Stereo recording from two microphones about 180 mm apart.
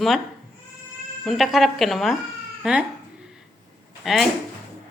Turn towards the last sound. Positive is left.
turn(degrees=0)  # may be behind; listen again after turning